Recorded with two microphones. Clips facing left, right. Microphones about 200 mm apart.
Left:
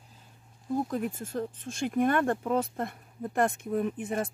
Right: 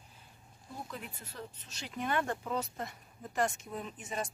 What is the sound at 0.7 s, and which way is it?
Speech, 45° left (ahead or behind).